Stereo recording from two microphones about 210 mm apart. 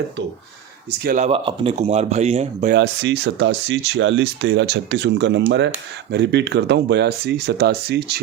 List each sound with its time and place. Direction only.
1.0 s speech: 40° right (ahead or behind)
1.3 s speech: 25° right (ahead or behind)
2.7 s speech: 55° right (ahead or behind)